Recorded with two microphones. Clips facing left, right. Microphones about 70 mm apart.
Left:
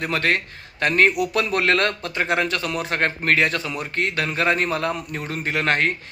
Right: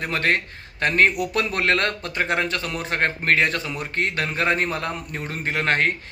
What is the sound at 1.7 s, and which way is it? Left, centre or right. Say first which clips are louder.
Speech: left 1 dB; left.